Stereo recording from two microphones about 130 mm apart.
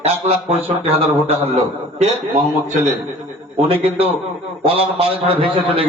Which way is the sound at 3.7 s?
50° right (ahead or behind).